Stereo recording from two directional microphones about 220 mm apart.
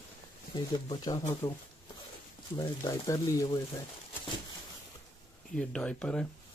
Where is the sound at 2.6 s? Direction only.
15° left (ahead or behind).